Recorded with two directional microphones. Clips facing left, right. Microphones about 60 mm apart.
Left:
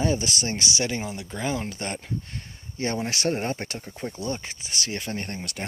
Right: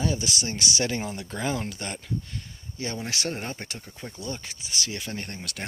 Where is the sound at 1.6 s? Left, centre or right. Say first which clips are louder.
Left 2 dB; left.